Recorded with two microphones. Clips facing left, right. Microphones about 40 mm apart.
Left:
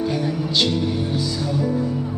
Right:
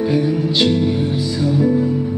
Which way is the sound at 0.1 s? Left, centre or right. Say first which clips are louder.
Right 5 dB; centre.